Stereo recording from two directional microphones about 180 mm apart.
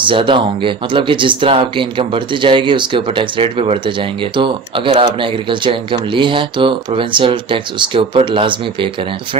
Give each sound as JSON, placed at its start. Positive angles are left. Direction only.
{"t": 0.0, "sound": "speech", "side_deg": -25}